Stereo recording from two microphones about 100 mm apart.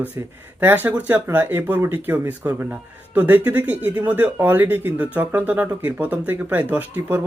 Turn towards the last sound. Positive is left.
turn(degrees=-15)  # may be behind; listen again after turning